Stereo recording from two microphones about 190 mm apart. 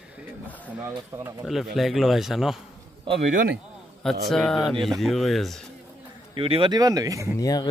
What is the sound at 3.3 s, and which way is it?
Speech, 55° right (ahead or behind).